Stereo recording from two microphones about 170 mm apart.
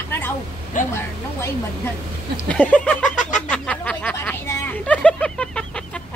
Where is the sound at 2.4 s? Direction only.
10° left (ahead or behind).